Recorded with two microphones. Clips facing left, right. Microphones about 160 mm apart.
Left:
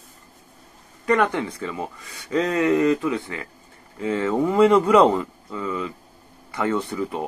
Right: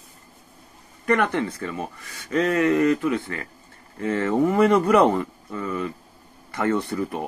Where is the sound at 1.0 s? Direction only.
20° left (ahead or behind).